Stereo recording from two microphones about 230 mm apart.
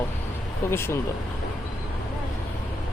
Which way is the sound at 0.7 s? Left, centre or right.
Centre.